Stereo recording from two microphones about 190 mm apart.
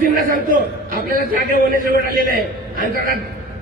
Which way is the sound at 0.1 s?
50° right (ahead or behind).